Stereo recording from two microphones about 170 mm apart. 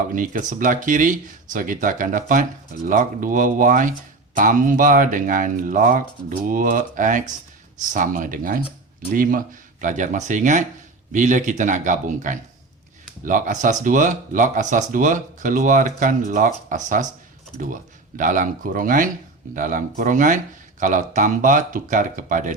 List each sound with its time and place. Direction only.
0.1 s speech: 50° right (ahead or behind)
18.2 s speech: 50° right (ahead or behind)